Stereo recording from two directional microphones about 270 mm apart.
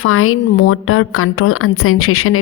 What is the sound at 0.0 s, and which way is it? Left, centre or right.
Speech, left.